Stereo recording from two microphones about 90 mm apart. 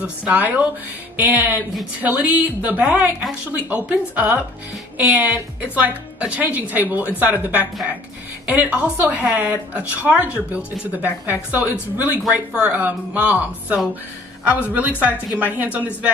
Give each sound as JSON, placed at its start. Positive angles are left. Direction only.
{"t": 0.0, "sound": "a woman's voice", "side_deg": -15}